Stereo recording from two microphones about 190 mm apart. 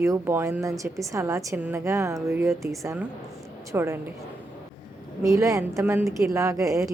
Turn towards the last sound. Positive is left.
turn(degrees=-15)  # may be behind; listen again after turning